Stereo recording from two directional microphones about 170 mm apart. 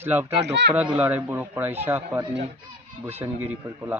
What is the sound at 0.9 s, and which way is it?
Speech, 10° right (ahead or behind).